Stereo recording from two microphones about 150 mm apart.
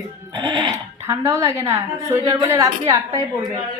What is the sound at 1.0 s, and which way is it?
A woman's voice, 20° right (ahead or behind).